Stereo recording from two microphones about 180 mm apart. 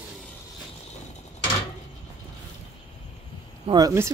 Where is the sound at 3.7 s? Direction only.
20° right (ahead or behind).